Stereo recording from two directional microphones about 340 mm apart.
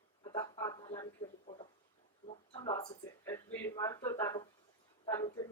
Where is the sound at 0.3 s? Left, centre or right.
Centre.